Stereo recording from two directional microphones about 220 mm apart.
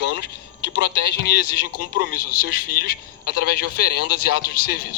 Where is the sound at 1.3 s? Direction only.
45° left (ahead or behind).